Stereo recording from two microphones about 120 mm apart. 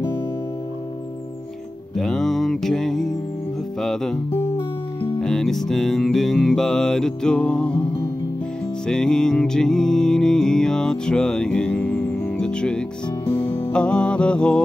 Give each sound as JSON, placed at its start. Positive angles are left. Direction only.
{"t": 2.0, "sound": "music", "side_deg": 0}
{"t": 4.6, "sound": "music", "side_deg": 40}
{"t": 5.2, "sound": "music", "side_deg": 5}